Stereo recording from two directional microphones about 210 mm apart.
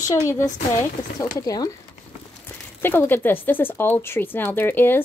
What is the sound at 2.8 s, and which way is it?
A woman's voice, 10° left (ahead or behind).